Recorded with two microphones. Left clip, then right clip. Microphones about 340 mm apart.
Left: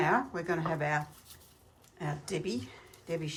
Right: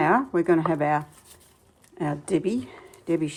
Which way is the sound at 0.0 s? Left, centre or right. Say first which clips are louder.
Right 8 dB; centre.